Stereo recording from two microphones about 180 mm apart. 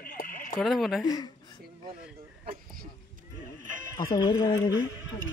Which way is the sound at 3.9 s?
20° left (ahead or behind).